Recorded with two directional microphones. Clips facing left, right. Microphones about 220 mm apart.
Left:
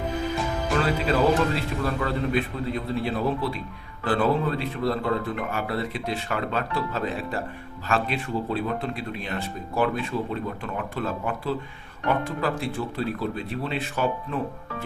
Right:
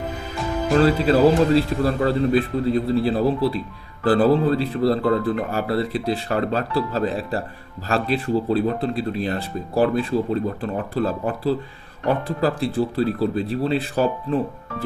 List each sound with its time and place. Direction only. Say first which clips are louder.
0.7 s speech: right 8 dB; 35° right (ahead or behind)